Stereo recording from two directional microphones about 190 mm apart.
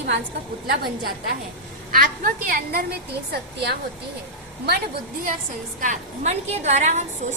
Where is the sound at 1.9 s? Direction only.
50° right (ahead or behind).